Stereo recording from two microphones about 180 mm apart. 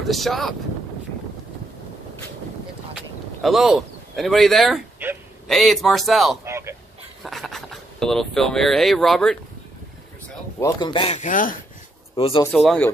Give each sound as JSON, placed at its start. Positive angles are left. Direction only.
{"t": 0.1, "sound": "speech", "side_deg": 0}
{"t": 3.4, "sound": "speech", "side_deg": 0}
{"t": 6.4, "sound": "a sound", "side_deg": -15}
{"t": 7.2, "sound": "speech", "side_deg": 0}
{"t": 10.6, "sound": "speech", "side_deg": 25}
{"t": 12.2, "sound": "speech", "side_deg": 30}
{"t": 12.5, "sound": "speech", "side_deg": 5}